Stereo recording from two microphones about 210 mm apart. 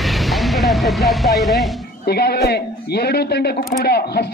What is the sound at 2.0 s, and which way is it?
A man's voice, 50° left (ahead or behind).